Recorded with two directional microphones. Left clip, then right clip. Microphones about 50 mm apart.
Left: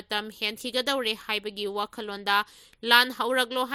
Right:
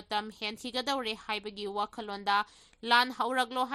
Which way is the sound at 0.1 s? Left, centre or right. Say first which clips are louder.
Left 4 dB; left.